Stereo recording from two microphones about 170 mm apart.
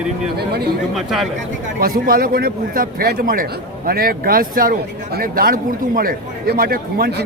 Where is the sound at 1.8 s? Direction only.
60° right (ahead or behind).